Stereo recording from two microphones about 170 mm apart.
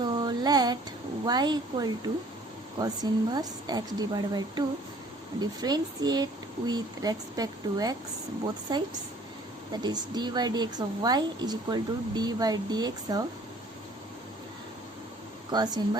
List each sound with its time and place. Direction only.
0.0 s a sound: 25° right (ahead or behind)
1.2 s a woman's voice: 25° right (ahead or behind)
15.5 s a woman's voice: 25° right (ahead or behind)